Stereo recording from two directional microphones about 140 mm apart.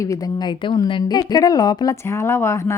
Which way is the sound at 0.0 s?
25° left (ahead or behind).